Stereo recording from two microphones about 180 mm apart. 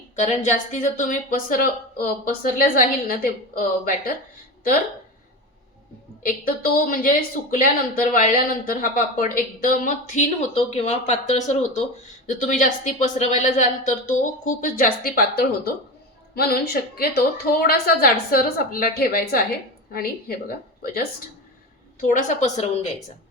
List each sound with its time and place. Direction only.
0.2 s speech: 40° left (ahead or behind)
6.2 s a woman's voice: 50° left (ahead or behind)
22.0 s a woman's voice: 45° left (ahead or behind)